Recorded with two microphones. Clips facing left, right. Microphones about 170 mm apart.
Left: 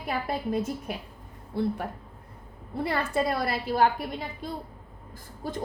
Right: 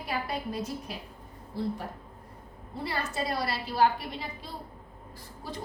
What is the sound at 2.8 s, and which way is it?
A woman's voice, 55° left (ahead or behind).